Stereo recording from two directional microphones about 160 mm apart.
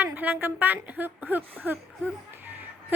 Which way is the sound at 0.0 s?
10° right (ahead or behind).